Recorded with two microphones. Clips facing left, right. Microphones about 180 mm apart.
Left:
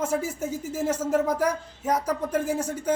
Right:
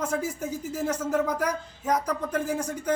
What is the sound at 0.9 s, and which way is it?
Speech, 25° left (ahead or behind).